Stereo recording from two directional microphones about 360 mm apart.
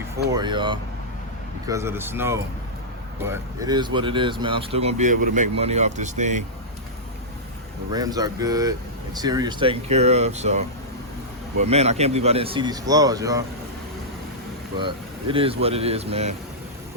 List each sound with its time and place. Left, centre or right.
0.3 s speech: centre
7.9 s speech: centre
14.8 s speech: centre